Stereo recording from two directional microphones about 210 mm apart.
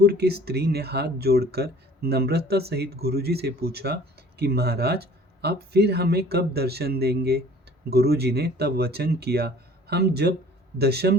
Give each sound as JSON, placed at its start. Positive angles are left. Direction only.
{"t": 0.0, "sound": "speech", "side_deg": -50}